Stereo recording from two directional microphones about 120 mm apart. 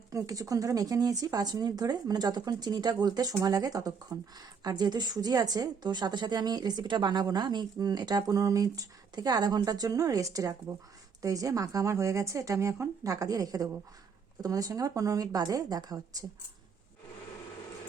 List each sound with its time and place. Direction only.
0.1 s speech: 30° right (ahead or behind)